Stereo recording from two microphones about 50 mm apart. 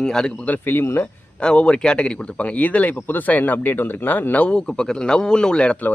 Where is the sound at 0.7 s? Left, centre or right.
Left.